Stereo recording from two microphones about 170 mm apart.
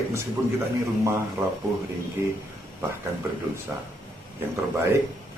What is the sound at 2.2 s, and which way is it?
Speech, 15° right (ahead or behind).